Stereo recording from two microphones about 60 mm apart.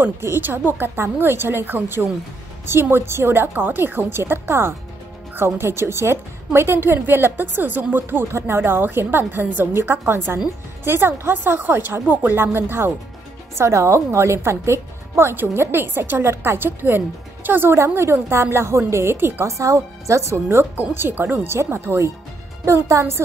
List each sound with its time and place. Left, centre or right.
0.0 s a woman's voice: right
13.6 s a woman's voice: right
17.7 s a woman's voice: right
19.4 s speech: right
20.7 s a woman's voice: right